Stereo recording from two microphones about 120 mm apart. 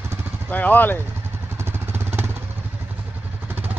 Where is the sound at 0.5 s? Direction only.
15° left (ahead or behind).